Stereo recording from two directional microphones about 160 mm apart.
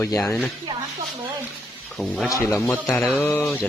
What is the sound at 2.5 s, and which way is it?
Speech, 10° left (ahead or behind).